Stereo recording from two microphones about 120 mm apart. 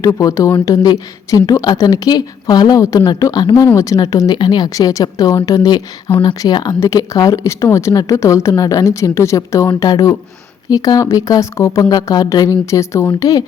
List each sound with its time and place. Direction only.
0.0 s a woman's voice: 30° left (ahead or behind)